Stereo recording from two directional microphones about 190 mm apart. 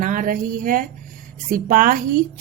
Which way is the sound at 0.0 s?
45° right (ahead or behind).